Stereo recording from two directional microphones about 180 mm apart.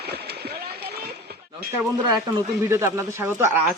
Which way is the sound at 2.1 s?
20° right (ahead or behind).